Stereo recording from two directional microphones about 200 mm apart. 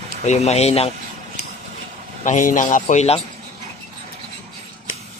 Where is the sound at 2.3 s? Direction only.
40° left (ahead or behind).